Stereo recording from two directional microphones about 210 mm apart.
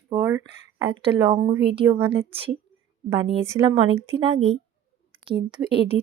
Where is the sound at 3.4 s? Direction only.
15° right (ahead or behind).